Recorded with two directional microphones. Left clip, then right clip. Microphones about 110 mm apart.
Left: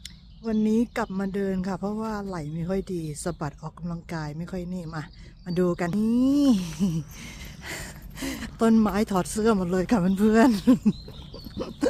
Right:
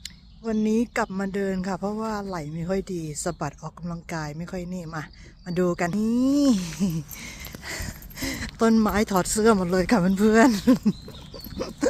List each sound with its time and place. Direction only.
0.4 s speech: 5° left (ahead or behind)
7.6 s a sound: 25° left (ahead or behind)
8.3 s speech: 5° left (ahead or behind)
9.2 s speech: 15° right (ahead or behind); by 10.8 s centre (ahead or behind)